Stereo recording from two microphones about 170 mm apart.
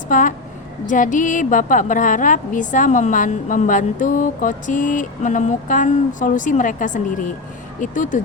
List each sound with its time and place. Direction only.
0.1 s a woman's voice: 50° left (ahead or behind)